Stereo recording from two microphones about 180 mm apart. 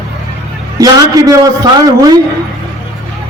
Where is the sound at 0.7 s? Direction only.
20° right (ahead or behind).